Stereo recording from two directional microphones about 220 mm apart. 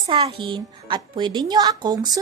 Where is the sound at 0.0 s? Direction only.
20° right (ahead or behind).